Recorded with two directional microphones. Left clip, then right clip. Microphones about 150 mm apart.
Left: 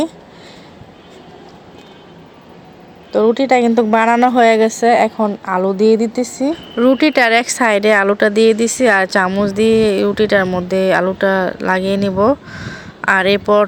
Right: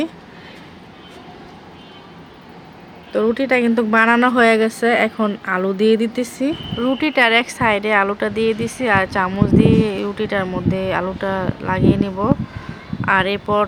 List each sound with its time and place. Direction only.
3.1 s a woman's voice: 20° left (ahead or behind)
6.7 s speech: 40° left (ahead or behind)